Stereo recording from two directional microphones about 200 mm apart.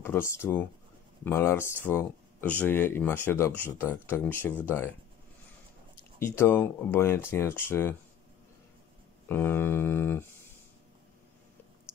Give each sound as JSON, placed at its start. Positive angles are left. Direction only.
{"t": 0.0, "sound": "speech", "side_deg": 10}
{"t": 6.1, "sound": "speech", "side_deg": 10}
{"t": 9.3, "sound": "speech", "side_deg": 10}